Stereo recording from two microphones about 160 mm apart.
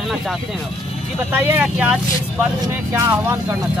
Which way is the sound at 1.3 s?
10° right (ahead or behind).